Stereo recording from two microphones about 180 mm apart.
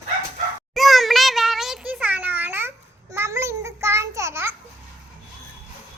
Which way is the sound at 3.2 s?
15° right (ahead or behind).